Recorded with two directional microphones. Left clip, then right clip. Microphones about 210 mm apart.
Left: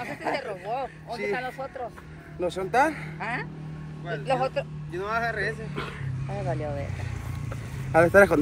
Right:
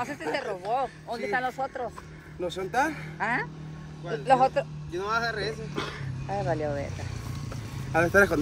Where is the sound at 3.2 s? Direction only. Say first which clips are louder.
Right 7 dB; 50° right (ahead or behind).